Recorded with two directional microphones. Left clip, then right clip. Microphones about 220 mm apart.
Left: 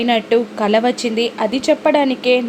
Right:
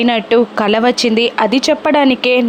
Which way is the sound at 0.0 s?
20° right (ahead or behind).